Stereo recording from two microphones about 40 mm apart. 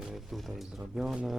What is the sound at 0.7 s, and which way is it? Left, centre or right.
Speech, centre.